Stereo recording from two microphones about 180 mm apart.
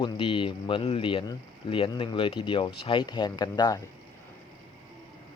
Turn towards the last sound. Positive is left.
turn(degrees=20)  # may be behind; listen again after turning